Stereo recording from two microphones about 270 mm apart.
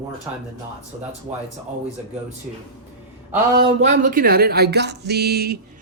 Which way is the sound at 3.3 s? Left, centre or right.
Centre.